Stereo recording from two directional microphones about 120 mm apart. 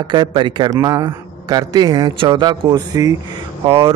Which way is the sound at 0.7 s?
30° right (ahead or behind).